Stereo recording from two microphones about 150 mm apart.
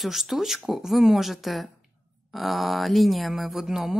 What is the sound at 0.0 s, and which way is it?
A woman's voice, centre (ahead or behind).